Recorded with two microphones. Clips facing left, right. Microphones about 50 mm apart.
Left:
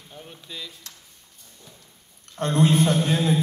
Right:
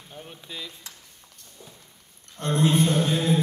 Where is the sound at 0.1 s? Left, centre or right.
Centre.